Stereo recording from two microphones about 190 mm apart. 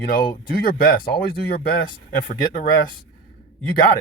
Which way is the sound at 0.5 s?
50° left (ahead or behind).